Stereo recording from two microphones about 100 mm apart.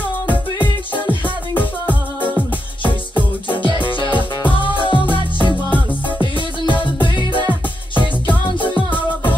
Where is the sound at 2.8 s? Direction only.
55° left (ahead or behind).